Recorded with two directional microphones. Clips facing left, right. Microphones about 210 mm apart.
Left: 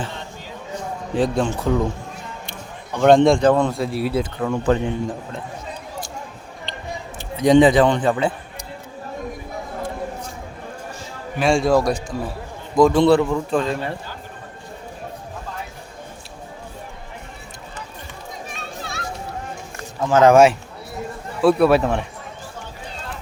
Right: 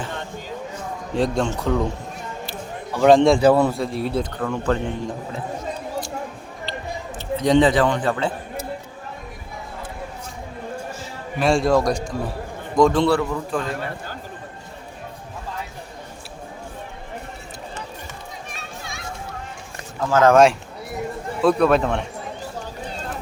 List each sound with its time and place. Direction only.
1.1 s a man's voice: centre (ahead or behind)
7.2 s a man's voice: 15° left (ahead or behind)
11.3 s a man's voice: centre (ahead or behind)
13.0 s a man's voice: 20° left (ahead or behind)
20.0 s a man's voice: 20° left (ahead or behind)
20.3 s a man's voice: 5° left (ahead or behind)